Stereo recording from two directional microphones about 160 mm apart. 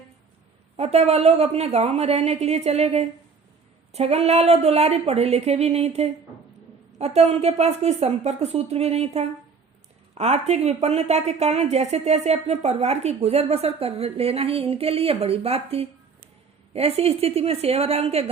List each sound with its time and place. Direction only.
0.8 s speech: 40° right (ahead or behind)